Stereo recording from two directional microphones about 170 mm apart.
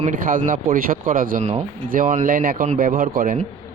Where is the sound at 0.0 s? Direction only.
55° right (ahead or behind).